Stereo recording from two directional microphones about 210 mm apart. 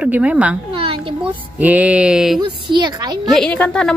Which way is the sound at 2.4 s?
20° right (ahead or behind).